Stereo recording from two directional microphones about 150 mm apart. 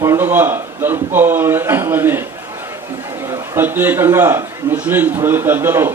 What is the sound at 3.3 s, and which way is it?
A man's voice, 15° right (ahead or behind).